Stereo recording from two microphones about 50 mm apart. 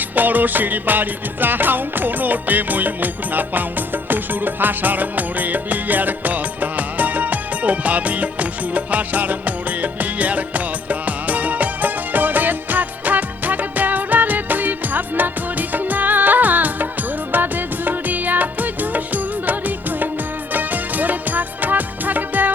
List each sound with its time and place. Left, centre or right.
0.2 s music: right